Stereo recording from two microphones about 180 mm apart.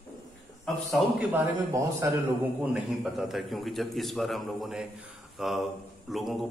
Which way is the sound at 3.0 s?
Centre (ahead or behind).